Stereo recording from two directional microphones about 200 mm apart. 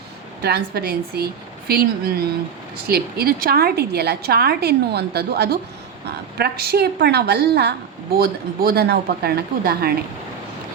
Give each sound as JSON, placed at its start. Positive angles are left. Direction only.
{"t": 0.4, "sound": "a woman's voice", "side_deg": -55}